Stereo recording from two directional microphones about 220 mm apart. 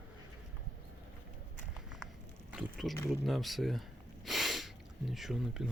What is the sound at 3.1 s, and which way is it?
Speech, centre (ahead or behind).